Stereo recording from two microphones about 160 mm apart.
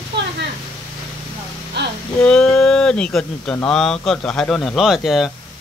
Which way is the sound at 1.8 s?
90° right.